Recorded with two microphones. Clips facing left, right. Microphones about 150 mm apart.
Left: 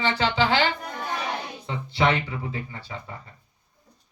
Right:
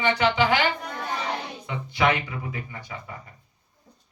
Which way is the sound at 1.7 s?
30° left (ahead or behind).